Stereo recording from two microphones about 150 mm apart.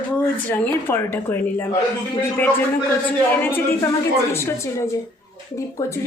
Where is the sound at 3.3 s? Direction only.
15° left (ahead or behind).